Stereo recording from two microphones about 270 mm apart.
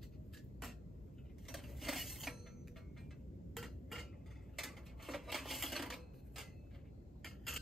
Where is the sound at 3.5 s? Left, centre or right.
Centre.